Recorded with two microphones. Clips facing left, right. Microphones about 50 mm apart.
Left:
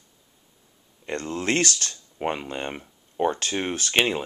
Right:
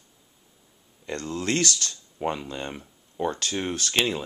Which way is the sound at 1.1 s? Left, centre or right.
Left.